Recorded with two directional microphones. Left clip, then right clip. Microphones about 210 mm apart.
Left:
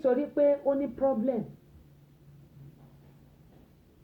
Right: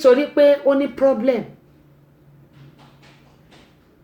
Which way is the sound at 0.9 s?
30° right (ahead or behind).